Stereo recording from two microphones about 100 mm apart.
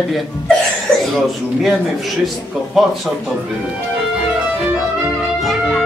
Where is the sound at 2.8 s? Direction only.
Centre (ahead or behind).